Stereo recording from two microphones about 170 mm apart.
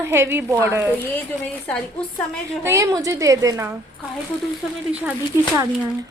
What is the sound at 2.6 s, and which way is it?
A woman's voice, 20° right (ahead or behind).